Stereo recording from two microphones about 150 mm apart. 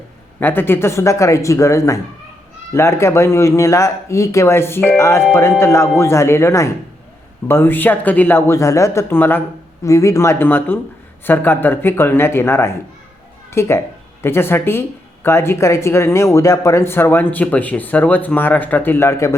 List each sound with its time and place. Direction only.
0.3 s speech: 15° left (ahead or behind)